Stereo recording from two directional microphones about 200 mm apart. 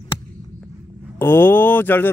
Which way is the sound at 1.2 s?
10° left (ahead or behind).